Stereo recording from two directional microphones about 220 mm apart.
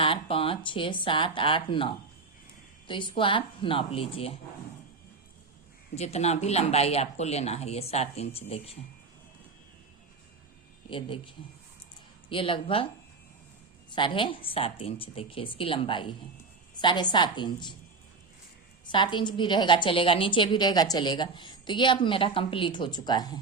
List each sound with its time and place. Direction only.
0.0 s a woman's voice: 25° left (ahead or behind)
5.9 s a woman's voice: 30° left (ahead or behind)
10.8 s a woman's voice: 25° left (ahead or behind)
13.9 s a woman's voice: 20° left (ahead or behind)
18.9 s a woman's voice: 20° left (ahead or behind)